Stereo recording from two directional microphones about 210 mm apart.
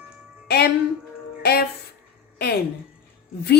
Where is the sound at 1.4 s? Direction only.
50° left (ahead or behind).